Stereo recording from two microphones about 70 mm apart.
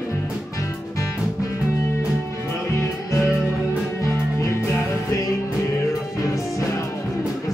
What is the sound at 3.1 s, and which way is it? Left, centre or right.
Music, left.